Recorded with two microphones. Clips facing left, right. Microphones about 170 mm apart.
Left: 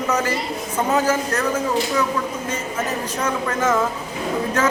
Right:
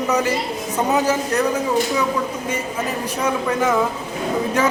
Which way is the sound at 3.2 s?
15° right (ahead or behind).